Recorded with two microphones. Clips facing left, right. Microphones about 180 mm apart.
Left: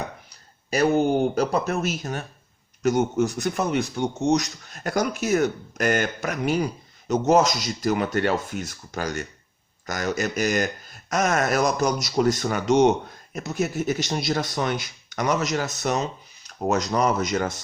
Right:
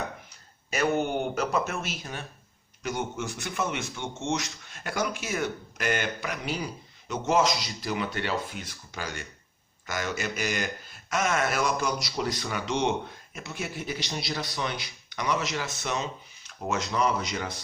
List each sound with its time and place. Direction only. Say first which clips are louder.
0.3 s speech: left 7 dB; 35° left (ahead or behind)